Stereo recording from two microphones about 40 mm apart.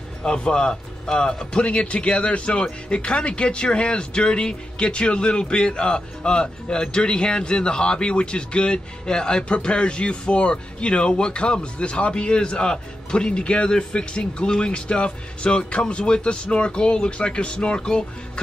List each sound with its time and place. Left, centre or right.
0.2 s speech: left